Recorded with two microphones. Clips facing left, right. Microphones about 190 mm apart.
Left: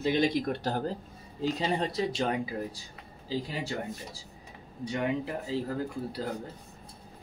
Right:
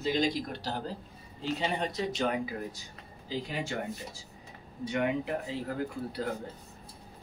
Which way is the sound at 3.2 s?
35° left (ahead or behind).